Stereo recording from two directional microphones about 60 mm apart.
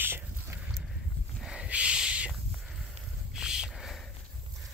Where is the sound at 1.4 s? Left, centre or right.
Centre.